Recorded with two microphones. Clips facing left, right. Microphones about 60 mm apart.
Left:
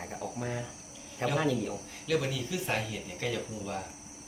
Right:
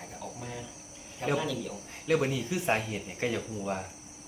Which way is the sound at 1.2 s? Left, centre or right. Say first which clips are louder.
Right 1 dB; left.